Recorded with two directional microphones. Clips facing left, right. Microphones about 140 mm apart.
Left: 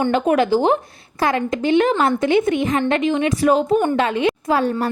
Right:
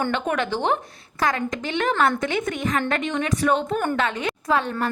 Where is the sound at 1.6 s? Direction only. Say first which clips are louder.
Left 6 dB; 25° left (ahead or behind).